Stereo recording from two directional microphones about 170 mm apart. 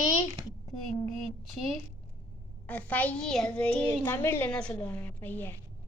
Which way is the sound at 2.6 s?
10° left (ahead or behind).